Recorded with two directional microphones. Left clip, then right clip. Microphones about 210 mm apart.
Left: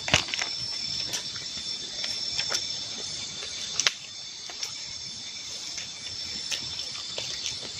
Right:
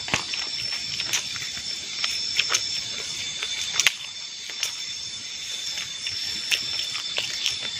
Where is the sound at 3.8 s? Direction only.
5° left (ahead or behind).